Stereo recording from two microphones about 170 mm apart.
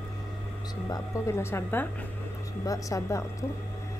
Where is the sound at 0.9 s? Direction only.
15° left (ahead or behind).